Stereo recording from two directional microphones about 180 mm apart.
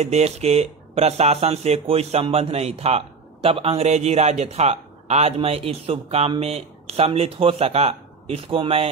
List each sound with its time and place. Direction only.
0.0 s speech: 35° right (ahead or behind)